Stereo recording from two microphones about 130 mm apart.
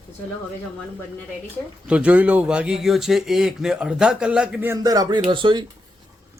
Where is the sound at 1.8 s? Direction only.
10° right (ahead or behind).